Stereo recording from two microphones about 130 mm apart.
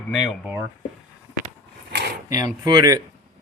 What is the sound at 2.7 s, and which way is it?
Speech, 30° right (ahead or behind).